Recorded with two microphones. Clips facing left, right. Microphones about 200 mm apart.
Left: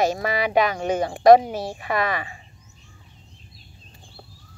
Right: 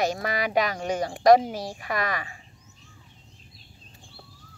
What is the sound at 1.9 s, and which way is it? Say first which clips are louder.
Speech: left 4 dB; 45° right (ahead or behind).